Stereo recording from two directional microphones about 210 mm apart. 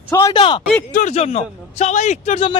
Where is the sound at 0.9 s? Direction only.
30° left (ahead or behind).